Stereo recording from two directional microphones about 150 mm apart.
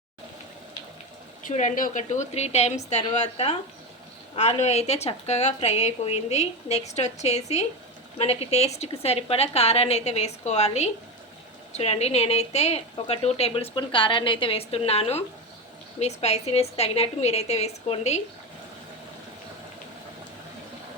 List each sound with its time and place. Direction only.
1.5 s a woman's voice: 60° left (ahead or behind)